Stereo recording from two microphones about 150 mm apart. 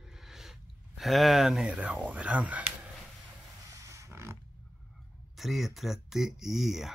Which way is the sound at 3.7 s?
20° right (ahead or behind).